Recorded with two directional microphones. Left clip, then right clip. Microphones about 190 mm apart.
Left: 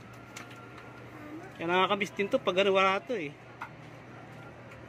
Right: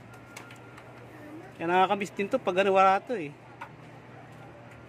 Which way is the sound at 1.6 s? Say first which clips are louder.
Right 3 dB; 25° right (ahead or behind).